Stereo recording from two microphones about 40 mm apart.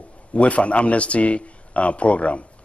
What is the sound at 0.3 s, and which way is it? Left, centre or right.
A man's voice, left.